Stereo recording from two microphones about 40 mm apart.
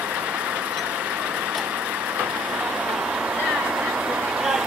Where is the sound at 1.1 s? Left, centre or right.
Right.